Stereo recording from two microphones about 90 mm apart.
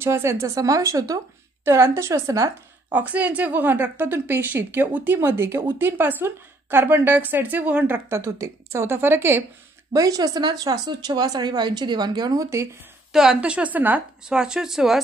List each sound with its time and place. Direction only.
0.0 s a woman's voice: 30° right (ahead or behind)
2.9 s a woman's voice: 20° right (ahead or behind)
9.9 s a woman's voice: 45° right (ahead or behind)
13.1 s a woman's voice: 5° right (ahead or behind)
14.3 s a woman's voice: 10° right (ahead or behind)